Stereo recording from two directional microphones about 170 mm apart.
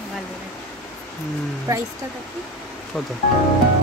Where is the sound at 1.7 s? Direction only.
20° right (ahead or behind).